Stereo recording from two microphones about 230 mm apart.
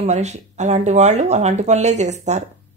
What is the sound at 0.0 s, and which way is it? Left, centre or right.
Speech, right.